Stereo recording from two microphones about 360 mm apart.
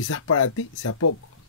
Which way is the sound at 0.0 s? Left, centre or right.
Left.